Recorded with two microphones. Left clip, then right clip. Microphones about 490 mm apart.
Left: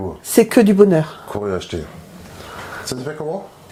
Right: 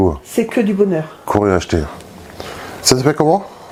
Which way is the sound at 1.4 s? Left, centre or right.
Right.